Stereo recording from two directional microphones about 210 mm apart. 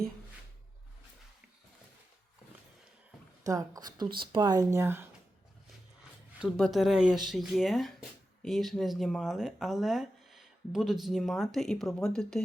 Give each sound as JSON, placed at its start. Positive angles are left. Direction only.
{"t": 3.4, "sound": "speech", "side_deg": -15}
{"t": 6.4, "sound": "speech", "side_deg": 0}